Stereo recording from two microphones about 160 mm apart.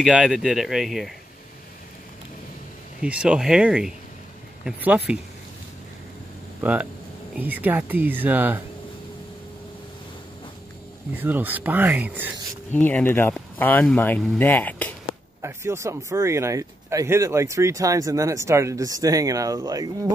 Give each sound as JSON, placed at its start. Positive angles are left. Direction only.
{"t": 0.0, "sound": "speech", "side_deg": -5}
{"t": 3.0, "sound": "speech", "side_deg": -5}
{"t": 6.6, "sound": "speech", "side_deg": -10}
{"t": 11.1, "sound": "speech", "side_deg": -10}
{"t": 12.7, "sound": "speech", "side_deg": 10}
{"t": 15.4, "sound": "speech", "side_deg": -15}